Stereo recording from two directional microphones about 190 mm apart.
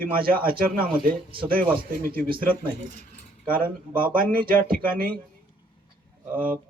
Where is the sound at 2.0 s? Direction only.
50° right (ahead or behind).